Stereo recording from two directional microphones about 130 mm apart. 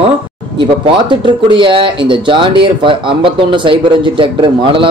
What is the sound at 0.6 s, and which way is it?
Speech, 40° right (ahead or behind).